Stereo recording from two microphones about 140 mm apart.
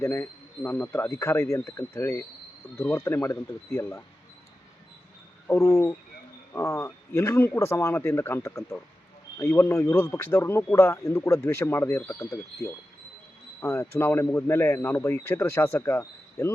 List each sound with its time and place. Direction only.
0.0 s speech: 15° left (ahead or behind)
5.5 s speech: 20° left (ahead or behind)